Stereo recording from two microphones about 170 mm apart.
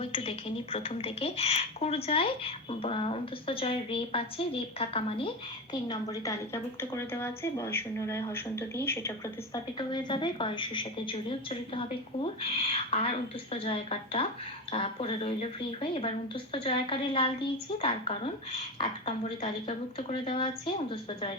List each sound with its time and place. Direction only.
0.0 s a woman's voice: 35° left (ahead or behind)
5.9 s a woman's voice: 20° left (ahead or behind)
9.7 s a woman's voice: 25° left (ahead or behind)